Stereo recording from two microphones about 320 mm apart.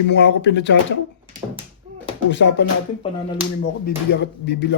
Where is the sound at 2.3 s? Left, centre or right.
Left.